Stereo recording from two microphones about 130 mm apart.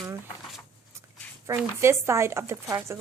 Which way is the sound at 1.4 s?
20° right (ahead or behind).